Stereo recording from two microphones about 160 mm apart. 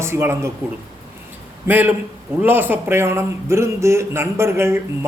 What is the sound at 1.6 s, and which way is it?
A man's voice, 10° right (ahead or behind).